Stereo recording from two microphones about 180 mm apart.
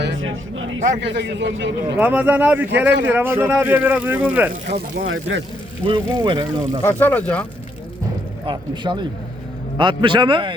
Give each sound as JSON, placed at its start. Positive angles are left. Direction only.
{"t": 0.0, "sound": "a sound", "side_deg": -90}
{"t": 1.0, "sound": "a man's voice", "side_deg": -80}
{"t": 2.0, "sound": "speech", "side_deg": -10}
{"t": 4.7, "sound": "speech", "side_deg": -90}
{"t": 5.8, "sound": "a man's voice", "side_deg": -25}
{"t": 6.8, "sound": "speech", "side_deg": 10}
{"t": 8.4, "sound": "a man's voice", "side_deg": -25}